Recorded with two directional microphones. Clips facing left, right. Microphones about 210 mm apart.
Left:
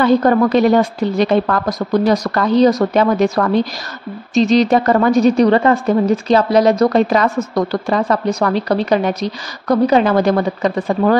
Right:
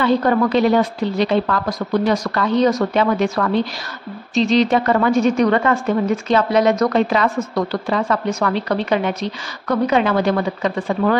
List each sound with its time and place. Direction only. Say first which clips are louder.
0.0 s a woman's voice: left 4 dB; 45° left (ahead or behind)